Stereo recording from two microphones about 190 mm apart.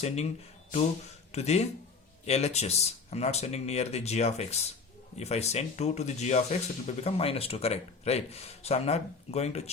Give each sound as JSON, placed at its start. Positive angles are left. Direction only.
{"t": 1.3, "sound": "speech", "side_deg": 35}